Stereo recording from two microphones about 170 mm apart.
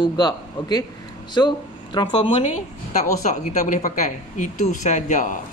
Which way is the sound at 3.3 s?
45° left (ahead or behind).